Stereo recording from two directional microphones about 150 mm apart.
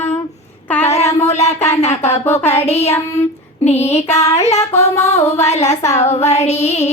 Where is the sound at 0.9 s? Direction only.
45° left (ahead or behind).